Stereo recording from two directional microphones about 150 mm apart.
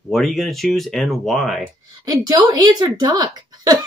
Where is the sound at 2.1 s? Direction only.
25° right (ahead or behind).